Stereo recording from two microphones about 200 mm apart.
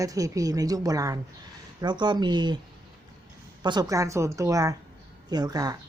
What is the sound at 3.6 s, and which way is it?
A woman's voice, 20° right (ahead or behind).